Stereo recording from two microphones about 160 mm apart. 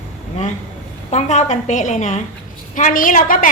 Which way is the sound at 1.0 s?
45° left (ahead or behind).